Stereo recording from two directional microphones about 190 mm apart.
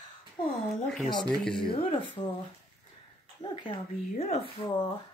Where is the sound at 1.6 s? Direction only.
25° left (ahead or behind).